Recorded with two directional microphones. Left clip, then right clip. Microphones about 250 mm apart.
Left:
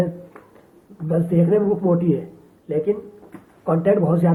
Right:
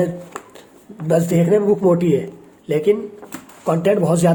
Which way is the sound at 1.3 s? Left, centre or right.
Right.